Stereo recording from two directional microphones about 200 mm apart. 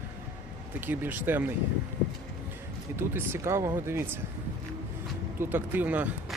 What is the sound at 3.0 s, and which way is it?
Speech, 10° right (ahead or behind).